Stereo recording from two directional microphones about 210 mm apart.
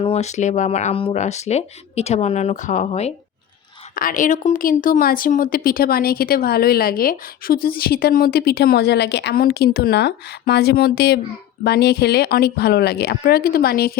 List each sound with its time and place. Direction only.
0.0 s speech: 30° left (ahead or behind); by 14.0 s 45° left (ahead or behind)